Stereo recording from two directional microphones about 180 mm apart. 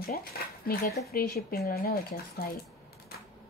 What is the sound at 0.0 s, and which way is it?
Speech, 55° left (ahead or behind).